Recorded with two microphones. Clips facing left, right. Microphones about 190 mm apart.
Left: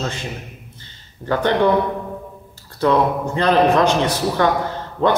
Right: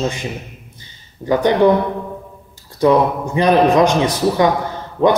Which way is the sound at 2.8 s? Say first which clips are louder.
Right 3 dB; 15° right (ahead or behind).